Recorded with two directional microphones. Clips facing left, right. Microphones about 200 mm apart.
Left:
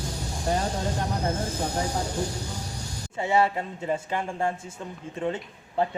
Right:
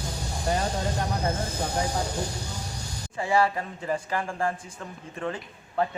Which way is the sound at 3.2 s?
25° left (ahead or behind).